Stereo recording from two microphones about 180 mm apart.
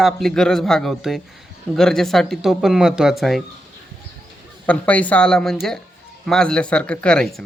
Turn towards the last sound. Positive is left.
turn(degrees=5)  # may be behind; listen again after turning